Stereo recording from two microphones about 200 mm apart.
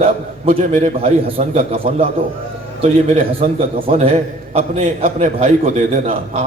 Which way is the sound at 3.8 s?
30° right (ahead or behind).